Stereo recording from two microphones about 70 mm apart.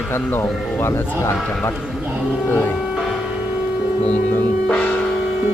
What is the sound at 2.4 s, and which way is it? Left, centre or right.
Speech, left.